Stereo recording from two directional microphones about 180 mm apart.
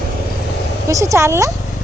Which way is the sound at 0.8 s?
15° right (ahead or behind).